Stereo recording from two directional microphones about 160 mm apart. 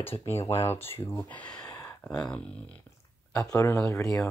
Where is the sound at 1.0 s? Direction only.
15° left (ahead or behind).